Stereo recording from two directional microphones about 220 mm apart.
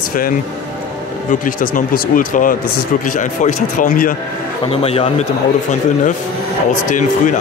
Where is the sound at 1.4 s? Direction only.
40° left (ahead or behind).